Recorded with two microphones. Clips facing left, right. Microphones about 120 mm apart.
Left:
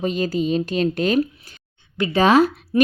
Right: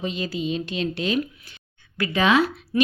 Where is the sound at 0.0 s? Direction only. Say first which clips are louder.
Left 6 dB; 45° left (ahead or behind).